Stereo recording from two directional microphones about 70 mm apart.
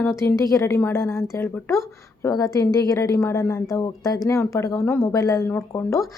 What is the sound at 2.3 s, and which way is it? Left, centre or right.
A woman's voice, left.